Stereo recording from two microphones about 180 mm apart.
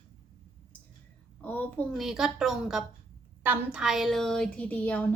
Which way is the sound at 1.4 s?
10° left (ahead or behind).